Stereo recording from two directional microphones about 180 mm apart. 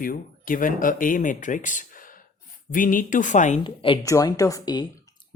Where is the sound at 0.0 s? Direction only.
50° left (ahead or behind).